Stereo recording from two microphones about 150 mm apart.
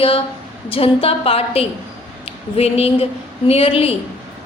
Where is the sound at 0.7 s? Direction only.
40° left (ahead or behind).